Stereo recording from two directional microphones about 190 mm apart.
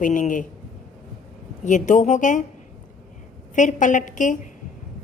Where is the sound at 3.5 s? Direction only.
40° left (ahead or behind).